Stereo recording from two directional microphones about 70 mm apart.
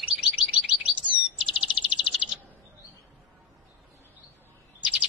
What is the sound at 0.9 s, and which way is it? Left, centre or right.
Bird, centre.